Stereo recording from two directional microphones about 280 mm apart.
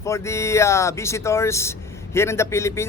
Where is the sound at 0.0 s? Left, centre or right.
Centre.